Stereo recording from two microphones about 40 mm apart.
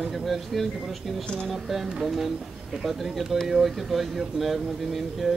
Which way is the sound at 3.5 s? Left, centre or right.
Centre.